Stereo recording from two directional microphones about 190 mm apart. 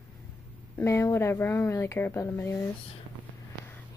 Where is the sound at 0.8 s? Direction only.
15° left (ahead or behind).